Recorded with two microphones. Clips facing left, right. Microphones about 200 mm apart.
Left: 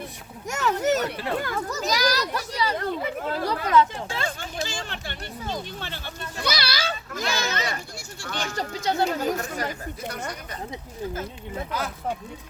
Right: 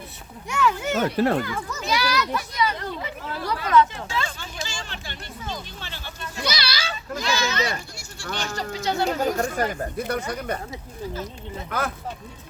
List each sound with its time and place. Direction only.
0.4 s speech: 40° left (ahead or behind)
1.1 s speech: 50° right (ahead or behind)
1.5 s a child's voice: 40° left (ahead or behind)
2.7 s speech: 50° left (ahead or behind)
3.4 s a child's voice: 35° left (ahead or behind)
4.1 s speech: 50° left (ahead or behind)
6.4 s a child's voice: 55° left (ahead or behind)
9.0 s speech: 45° right (ahead or behind)
10.1 s speech: 60° right (ahead or behind)
11.7 s speech: 55° right (ahead or behind)